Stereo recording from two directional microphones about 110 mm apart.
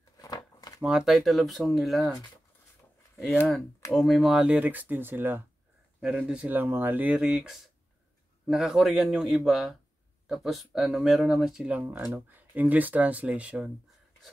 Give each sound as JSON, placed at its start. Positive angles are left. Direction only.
{"t": 0.4, "sound": "a sound", "side_deg": 35}
{"t": 0.8, "sound": "speech", "side_deg": -5}
{"t": 3.9, "sound": "speech", "side_deg": 0}